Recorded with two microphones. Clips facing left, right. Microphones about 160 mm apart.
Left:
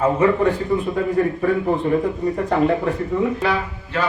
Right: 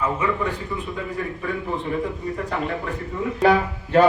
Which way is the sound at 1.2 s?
45° left (ahead or behind).